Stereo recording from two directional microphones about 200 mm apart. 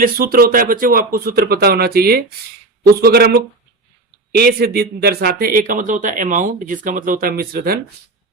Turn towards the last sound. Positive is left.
turn(degrees=-50)  # may be behind; listen again after turning